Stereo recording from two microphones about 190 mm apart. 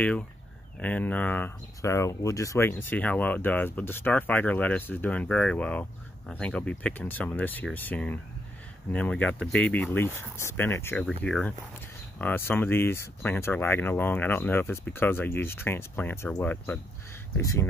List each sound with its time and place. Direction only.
0.7 s speech: 10° left (ahead or behind)